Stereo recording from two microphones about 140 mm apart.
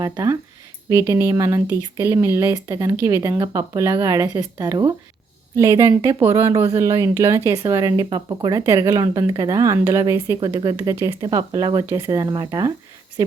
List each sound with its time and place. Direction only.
0.0 s a woman's voice: 25° right (ahead or behind)